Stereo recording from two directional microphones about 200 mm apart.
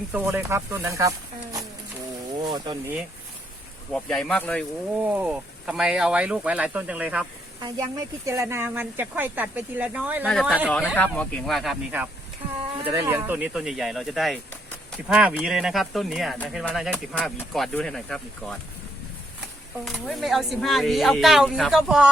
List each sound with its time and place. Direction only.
0.1 s speech: 10° right (ahead or behind)
2.4 s speech: 20° right (ahead or behind)
3.9 s speech: 5° left (ahead or behind)
5.0 s speech: 10° right (ahead or behind)
7.6 s speech: 20° right (ahead or behind); by 18.5 s 5° left (ahead or behind)
19.8 s speech: centre (ahead or behind)